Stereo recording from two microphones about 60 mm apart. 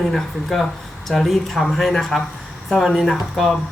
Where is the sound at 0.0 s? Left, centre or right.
Centre.